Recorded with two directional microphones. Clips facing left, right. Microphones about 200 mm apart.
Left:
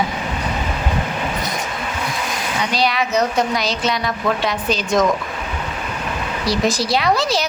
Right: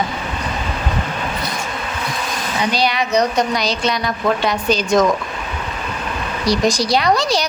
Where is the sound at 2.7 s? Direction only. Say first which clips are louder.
Right 1 dB; centre (ahead or behind).